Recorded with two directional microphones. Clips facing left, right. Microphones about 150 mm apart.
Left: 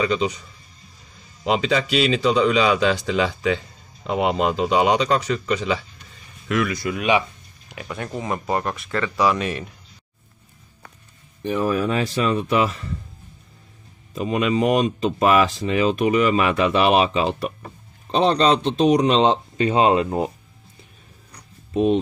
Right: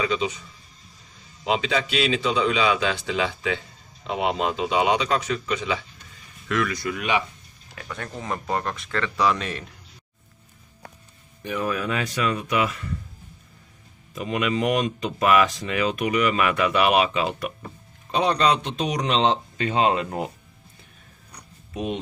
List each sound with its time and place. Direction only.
0.0 s a man's voice: 40° left (ahead or behind)
1.4 s a man's voice: 40° left (ahead or behind)
6.5 s speech: 15° left (ahead or behind)
11.4 s a man's voice: 35° left (ahead or behind)
14.1 s speech: 30° left (ahead or behind)
19.7 s speech: 30° left (ahead or behind)